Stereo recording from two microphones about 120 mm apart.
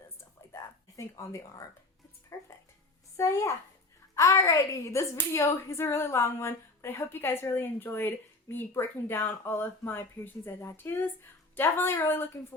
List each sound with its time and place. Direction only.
0.5 s a sound: 25° left (ahead or behind)
2.3 s music: 25° left (ahead or behind)
3.2 s a woman's voice: 25° left (ahead or behind)